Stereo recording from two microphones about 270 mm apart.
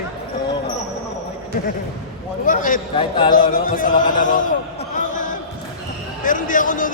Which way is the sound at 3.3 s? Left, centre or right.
Left.